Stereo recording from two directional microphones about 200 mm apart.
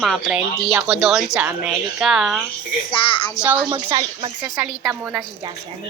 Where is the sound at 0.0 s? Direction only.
5° right (ahead or behind).